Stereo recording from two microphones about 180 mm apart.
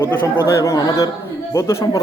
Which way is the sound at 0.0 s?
15° left (ahead or behind).